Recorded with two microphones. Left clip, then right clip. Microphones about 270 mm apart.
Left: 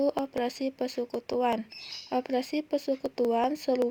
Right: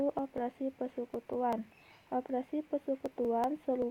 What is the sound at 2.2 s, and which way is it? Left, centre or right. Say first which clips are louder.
Speech: left 6 dB; centre.